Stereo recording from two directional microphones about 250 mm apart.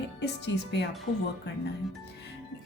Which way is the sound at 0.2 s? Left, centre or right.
Left.